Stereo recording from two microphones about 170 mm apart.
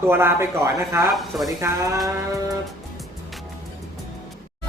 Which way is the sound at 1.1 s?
Centre (ahead or behind).